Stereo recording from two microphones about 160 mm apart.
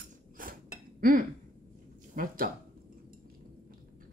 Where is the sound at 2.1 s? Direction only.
60° right (ahead or behind).